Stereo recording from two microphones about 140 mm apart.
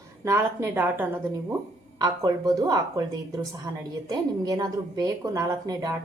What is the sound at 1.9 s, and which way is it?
A woman's voice, 30° right (ahead or behind).